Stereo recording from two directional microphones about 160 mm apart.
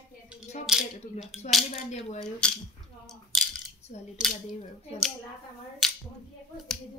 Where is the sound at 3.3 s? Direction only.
Centre (ahead or behind).